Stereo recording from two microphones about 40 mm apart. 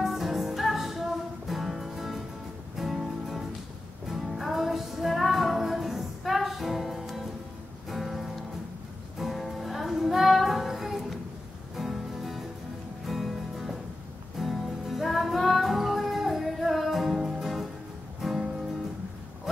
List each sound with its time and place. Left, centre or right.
0.0 s music: centre